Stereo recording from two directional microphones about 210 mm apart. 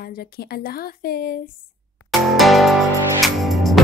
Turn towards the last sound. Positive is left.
turn(degrees=0)  # may be behind; listen again after turning